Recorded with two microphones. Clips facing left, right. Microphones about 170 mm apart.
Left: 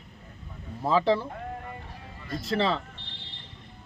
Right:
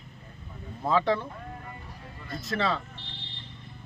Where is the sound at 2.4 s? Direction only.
30° left (ahead or behind).